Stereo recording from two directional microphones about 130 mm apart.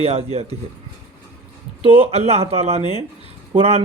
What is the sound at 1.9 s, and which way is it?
A man's voice, 50° right (ahead or behind).